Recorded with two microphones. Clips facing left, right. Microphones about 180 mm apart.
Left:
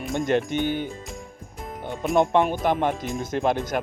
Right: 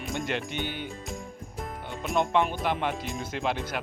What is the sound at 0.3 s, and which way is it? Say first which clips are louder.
Speech: left 9 dB; 45° left (ahead or behind).